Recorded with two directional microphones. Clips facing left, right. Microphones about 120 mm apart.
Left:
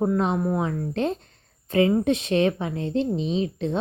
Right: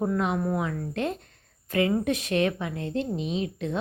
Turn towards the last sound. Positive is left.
turn(degrees=30)  # may be behind; listen again after turning